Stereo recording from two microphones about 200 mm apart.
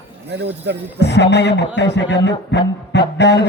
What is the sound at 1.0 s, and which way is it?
A man's voice, 60° left (ahead or behind).